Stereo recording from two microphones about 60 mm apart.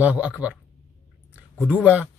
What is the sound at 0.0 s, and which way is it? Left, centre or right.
Speech, right.